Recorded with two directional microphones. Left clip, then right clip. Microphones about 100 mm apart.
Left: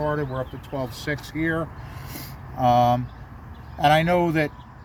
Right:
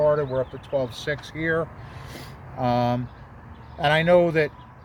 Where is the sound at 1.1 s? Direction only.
60° right (ahead or behind).